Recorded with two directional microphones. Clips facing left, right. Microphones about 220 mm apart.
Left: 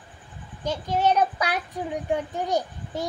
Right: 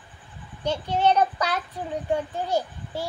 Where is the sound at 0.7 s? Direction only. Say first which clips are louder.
Right 1 dB; 10° left (ahead or behind).